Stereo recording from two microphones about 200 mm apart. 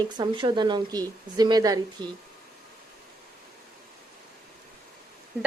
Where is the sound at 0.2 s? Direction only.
25° right (ahead or behind).